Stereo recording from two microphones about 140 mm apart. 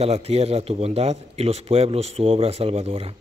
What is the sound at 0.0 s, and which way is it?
Speech, 45° right (ahead or behind).